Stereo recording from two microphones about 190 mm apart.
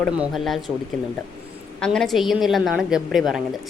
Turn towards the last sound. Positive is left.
turn(degrees=0)  # may be behind; listen again after turning